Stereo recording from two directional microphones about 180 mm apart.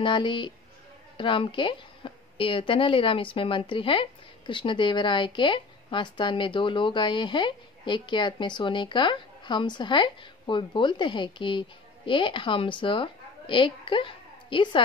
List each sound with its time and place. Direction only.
0.0 s a woman's voice: 25° left (ahead or behind)